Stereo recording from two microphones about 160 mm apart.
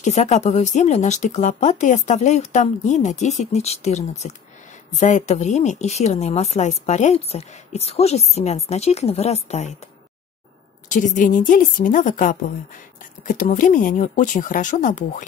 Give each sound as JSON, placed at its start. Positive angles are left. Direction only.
{"t": 0.0, "sound": "a woman's voice", "side_deg": 45}
{"t": 10.9, "sound": "speech", "side_deg": 55}